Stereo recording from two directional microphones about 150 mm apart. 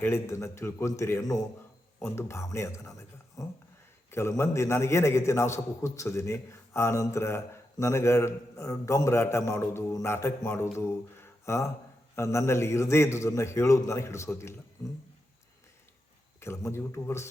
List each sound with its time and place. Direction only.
0.0 s a man's voice: 15° left (ahead or behind)
16.4 s speech: 20° left (ahead or behind)